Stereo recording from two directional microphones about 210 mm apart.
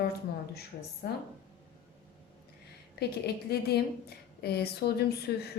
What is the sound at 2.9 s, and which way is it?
A woman's voice, 50° left (ahead or behind).